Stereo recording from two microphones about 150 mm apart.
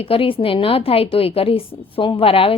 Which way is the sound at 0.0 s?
35° left (ahead or behind).